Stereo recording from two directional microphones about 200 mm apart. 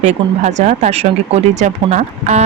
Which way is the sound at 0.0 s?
35° right (ahead or behind).